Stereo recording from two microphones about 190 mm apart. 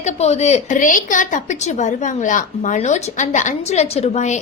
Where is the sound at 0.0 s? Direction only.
35° left (ahead or behind).